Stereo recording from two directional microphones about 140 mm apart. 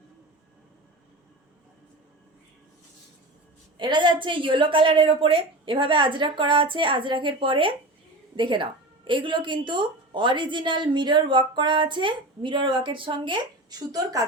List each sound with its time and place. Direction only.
3.8 s a woman's voice: 35° right (ahead or behind)